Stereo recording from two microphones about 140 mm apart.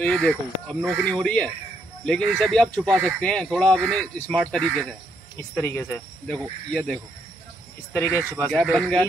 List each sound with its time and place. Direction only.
0.0 s speech: 5° left (ahead or behind)
1.0 s speech: 5° left (ahead or behind)
8.7 s speech: 5° left (ahead or behind)